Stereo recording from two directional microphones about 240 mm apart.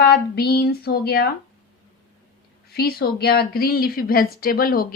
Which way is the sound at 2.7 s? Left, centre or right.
Left.